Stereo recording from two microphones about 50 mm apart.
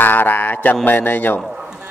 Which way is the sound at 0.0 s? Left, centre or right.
Left.